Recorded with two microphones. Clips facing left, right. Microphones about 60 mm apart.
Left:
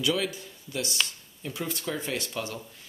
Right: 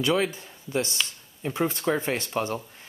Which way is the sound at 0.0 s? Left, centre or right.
Right.